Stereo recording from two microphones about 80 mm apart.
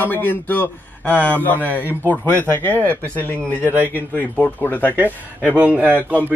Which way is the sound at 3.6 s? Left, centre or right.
Right.